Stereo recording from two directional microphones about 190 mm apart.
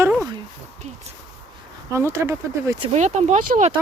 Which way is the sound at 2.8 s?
35° right (ahead or behind).